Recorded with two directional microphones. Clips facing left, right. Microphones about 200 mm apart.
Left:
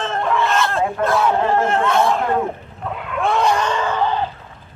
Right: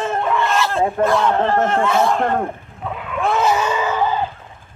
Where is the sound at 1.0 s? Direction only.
5° left (ahead or behind).